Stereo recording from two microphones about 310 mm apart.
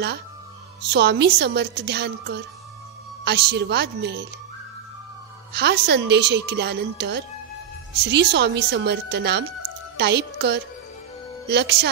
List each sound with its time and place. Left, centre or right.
0.8 s a woman's voice: right
5.5 s a woman's voice: right